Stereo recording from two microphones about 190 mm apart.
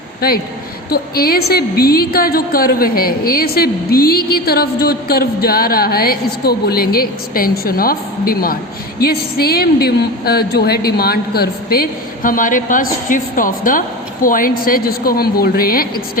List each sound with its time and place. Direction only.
0.2 s a woman's voice: 50° left (ahead or behind)